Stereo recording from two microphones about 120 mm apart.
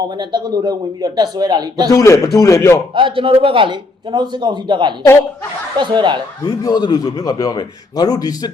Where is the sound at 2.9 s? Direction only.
45° right (ahead or behind).